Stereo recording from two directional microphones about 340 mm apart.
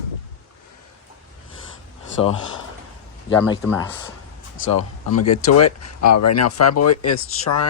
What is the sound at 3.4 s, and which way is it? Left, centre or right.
Speech, centre.